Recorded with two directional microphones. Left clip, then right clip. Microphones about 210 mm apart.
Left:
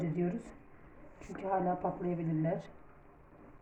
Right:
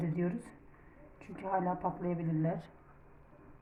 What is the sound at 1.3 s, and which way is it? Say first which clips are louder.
A woman's voice: left 1 dB; 35° right (ahead or behind).